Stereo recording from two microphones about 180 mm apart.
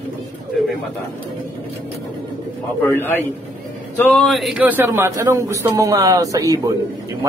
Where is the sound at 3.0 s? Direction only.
10° left (ahead or behind).